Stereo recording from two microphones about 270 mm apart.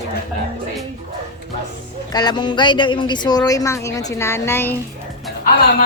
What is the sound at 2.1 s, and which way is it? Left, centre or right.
Speech, centre.